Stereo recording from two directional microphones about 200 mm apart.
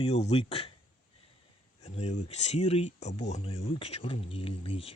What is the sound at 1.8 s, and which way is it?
Speech, 35° left (ahead or behind).